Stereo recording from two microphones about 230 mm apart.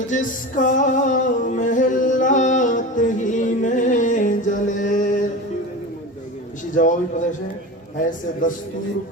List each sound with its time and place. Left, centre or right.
0.1 s music: left
7.9 s a man's voice: left